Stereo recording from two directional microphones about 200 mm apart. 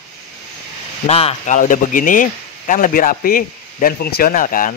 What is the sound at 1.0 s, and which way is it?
Speech, 30° left (ahead or behind).